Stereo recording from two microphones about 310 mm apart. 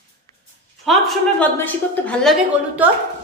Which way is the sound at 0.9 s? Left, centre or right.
Centre.